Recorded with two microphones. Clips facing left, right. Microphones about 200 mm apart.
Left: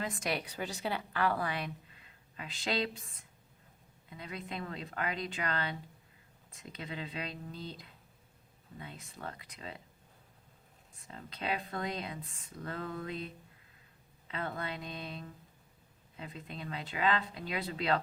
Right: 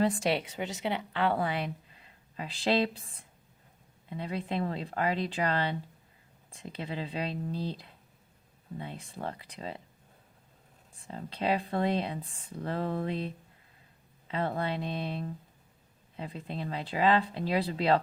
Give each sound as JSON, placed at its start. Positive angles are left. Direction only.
{"t": 0.0, "sound": "a woman's voice", "side_deg": -30}
{"t": 10.9, "sound": "a woman's voice", "side_deg": -30}